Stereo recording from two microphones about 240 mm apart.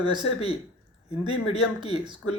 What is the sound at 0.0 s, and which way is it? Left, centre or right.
Speech, centre.